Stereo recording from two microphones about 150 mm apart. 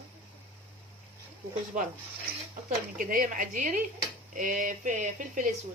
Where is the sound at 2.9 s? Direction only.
65° right (ahead or behind).